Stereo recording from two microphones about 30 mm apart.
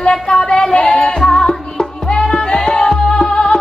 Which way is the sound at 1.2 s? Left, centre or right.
Centre.